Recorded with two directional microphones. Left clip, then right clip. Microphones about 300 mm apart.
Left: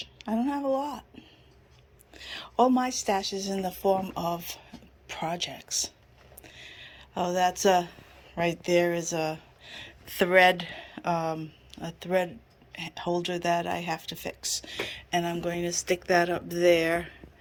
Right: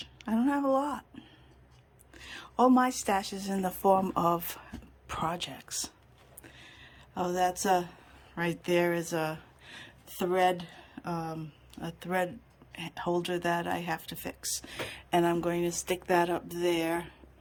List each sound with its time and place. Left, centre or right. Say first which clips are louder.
0.0 s speech: left 1 dB; centre
6.4 s a sound: left 6 dB; centre
8.4 s speech: left 4 dB; centre